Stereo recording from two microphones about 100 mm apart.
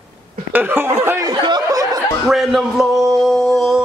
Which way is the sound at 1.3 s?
45° right (ahead or behind).